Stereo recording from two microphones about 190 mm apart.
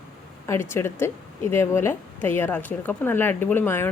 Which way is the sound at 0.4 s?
15° left (ahead or behind).